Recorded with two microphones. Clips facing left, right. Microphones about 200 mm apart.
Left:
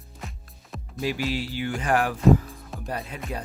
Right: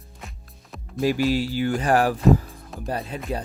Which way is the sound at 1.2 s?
40° right (ahead or behind).